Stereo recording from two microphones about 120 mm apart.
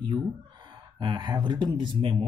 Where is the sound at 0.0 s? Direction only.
40° right (ahead or behind).